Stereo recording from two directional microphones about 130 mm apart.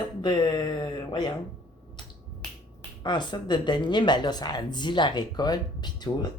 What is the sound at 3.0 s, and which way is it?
A woman's voice, 35° left (ahead or behind).